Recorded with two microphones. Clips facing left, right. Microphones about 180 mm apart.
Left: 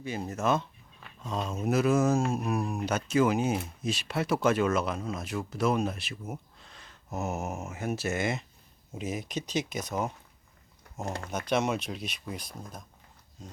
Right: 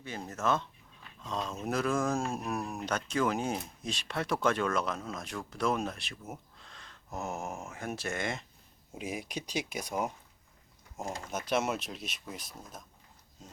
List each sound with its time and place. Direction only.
0.0 s speech: 10° left (ahead or behind)
9.0 s speech: 10° right (ahead or behind)
11.0 s speech: 65° left (ahead or behind)
11.3 s speech: 5° right (ahead or behind)